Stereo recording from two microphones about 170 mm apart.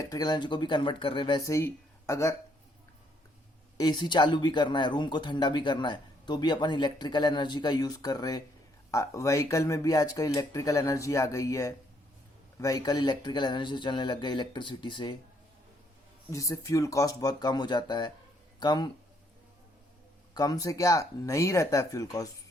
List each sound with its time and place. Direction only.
0.0 s speech: 20° left (ahead or behind)
3.8 s speech: 25° left (ahead or behind)
16.3 s speech: 20° left (ahead or behind)
20.3 s speech: 20° left (ahead or behind)